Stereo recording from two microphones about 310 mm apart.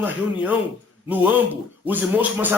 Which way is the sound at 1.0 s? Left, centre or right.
Centre.